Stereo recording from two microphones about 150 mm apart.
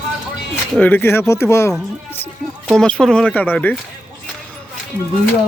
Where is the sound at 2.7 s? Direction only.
5° left (ahead or behind).